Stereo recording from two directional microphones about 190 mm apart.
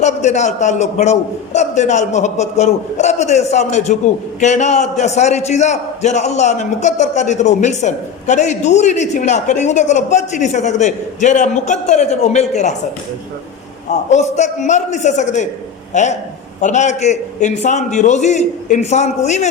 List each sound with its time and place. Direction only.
0.0 s a man's voice: 35° left (ahead or behind)
13.9 s a man's voice: 35° left (ahead or behind)